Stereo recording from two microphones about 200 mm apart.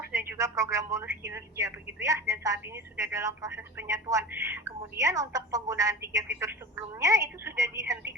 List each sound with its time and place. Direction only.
0.1 s a woman's voice: 15° right (ahead or behind)